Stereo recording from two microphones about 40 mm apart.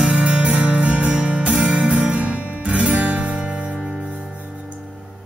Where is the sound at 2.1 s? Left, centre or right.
Right.